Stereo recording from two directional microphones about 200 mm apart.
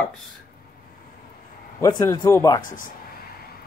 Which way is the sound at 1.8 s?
20° left (ahead or behind).